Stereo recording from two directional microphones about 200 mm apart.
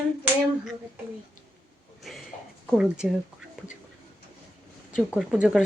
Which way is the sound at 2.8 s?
5° right (ahead or behind).